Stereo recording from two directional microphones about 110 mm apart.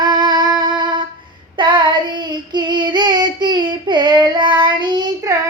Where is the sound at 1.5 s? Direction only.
45° right (ahead or behind).